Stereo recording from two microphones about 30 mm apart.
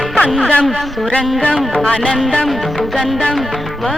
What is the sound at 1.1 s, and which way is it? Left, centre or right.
Music, left.